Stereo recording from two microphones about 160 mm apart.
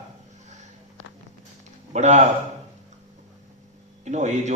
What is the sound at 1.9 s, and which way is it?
Speech, 45° right (ahead or behind).